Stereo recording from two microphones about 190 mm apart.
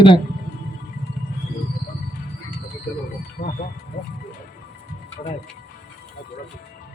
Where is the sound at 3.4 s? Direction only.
45° left (ahead or behind).